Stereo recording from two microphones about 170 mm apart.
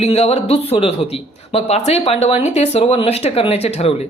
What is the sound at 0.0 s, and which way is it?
Speech, 40° left (ahead or behind).